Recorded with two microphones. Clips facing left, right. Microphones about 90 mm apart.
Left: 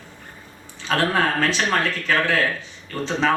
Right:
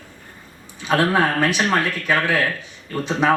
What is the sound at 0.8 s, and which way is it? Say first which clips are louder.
A man's voice: right 3 dB; 15° right (ahead or behind).